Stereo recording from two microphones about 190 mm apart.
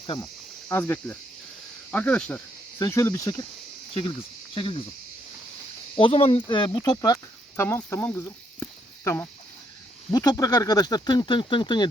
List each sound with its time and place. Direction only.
0.0 s speech: 25° left (ahead or behind)
0.7 s speech: 10° left (ahead or behind)
2.7 s speech: 15° left (ahead or behind)
4.5 s speech: 25° left (ahead or behind)
6.0 s speech: 30° left (ahead or behind)